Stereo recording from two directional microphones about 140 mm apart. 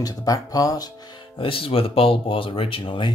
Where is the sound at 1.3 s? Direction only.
40° left (ahead or behind).